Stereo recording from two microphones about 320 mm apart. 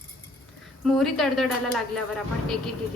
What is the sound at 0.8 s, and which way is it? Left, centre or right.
A woman's voice, centre.